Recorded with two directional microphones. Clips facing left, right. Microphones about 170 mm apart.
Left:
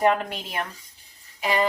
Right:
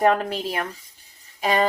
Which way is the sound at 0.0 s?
40° right (ahead or behind).